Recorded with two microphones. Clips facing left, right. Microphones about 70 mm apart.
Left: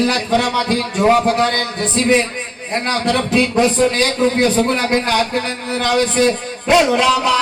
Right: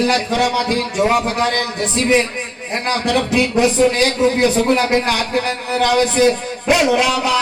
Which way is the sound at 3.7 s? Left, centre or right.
Left.